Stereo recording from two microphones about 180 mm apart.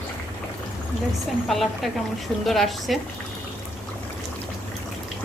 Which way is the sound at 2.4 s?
Centre (ahead or behind).